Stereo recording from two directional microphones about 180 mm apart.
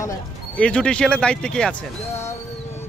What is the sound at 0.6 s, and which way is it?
Speech, 5° left (ahead or behind).